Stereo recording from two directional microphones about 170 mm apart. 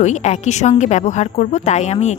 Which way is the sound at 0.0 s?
45° left (ahead or behind).